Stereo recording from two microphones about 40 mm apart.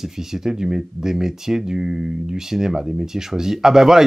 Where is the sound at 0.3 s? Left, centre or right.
Centre.